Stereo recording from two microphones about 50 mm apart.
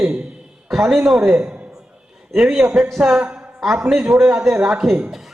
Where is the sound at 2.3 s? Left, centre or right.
Centre.